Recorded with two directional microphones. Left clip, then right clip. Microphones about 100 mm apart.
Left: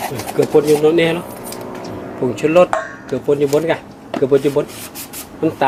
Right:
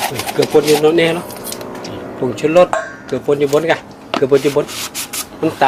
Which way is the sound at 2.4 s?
5° left (ahead or behind).